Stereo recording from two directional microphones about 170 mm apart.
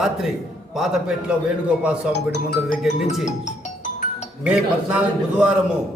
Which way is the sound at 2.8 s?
Centre (ahead or behind).